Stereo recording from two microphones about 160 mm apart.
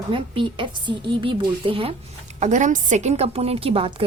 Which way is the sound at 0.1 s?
30° right (ahead or behind).